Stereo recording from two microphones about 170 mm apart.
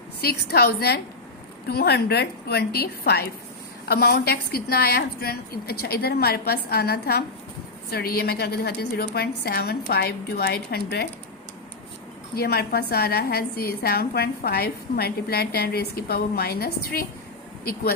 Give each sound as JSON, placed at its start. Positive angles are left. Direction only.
{"t": 0.2, "sound": "a woman's voice", "side_deg": 65}
{"t": 12.3, "sound": "a woman's voice", "side_deg": 65}